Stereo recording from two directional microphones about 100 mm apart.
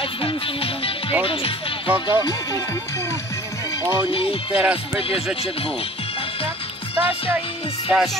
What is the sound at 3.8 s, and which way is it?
Speech, 30° right (ahead or behind).